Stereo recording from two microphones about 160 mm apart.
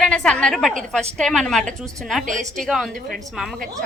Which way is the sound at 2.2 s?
50° right (ahead or behind).